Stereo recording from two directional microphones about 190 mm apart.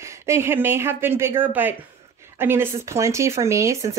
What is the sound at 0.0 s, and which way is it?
Speech, 15° right (ahead or behind).